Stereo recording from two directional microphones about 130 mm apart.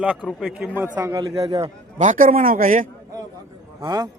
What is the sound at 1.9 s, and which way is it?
Speech, 70° right (ahead or behind).